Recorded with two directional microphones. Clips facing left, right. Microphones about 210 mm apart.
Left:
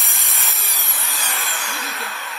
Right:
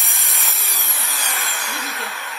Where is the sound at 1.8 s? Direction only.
Centre (ahead or behind).